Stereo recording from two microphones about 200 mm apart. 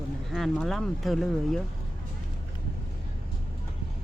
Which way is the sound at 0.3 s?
Centre (ahead or behind).